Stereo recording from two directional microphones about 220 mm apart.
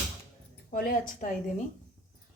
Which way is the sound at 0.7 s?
40° left (ahead or behind).